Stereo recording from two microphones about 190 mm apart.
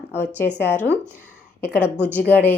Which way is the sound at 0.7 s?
10° right (ahead or behind).